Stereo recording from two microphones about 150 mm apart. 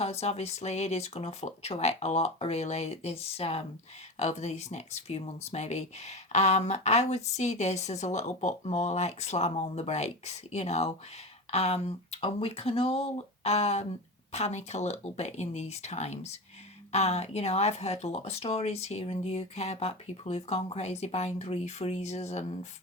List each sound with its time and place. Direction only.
0.0 s speech: 45° left (ahead or behind)